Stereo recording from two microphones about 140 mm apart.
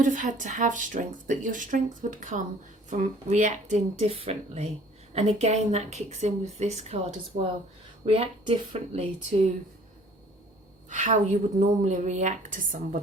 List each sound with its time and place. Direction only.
0.0 s a woman's voice: 65° right (ahead or behind); by 9.0 s 45° right (ahead or behind)
10.8 s speech: 60° right (ahead or behind)